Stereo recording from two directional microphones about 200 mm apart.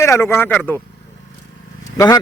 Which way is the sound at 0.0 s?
15° left (ahead or behind).